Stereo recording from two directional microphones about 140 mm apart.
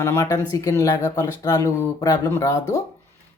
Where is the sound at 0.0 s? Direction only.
20° left (ahead or behind).